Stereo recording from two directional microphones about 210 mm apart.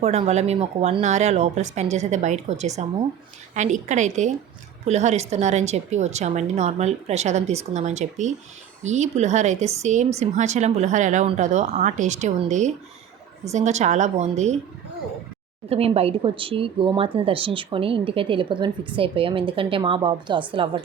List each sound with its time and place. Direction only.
0.0 s speech: 30° right (ahead or behind)
15.7 s speech: 30° right (ahead or behind)